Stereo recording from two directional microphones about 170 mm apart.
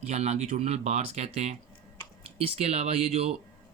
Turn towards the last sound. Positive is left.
turn(degrees=-35)  # may be behind; listen again after turning